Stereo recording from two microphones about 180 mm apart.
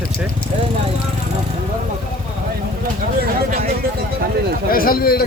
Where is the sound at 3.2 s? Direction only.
55° right (ahead or behind).